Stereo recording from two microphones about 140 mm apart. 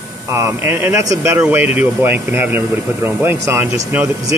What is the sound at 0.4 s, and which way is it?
Speech, 15° right (ahead or behind).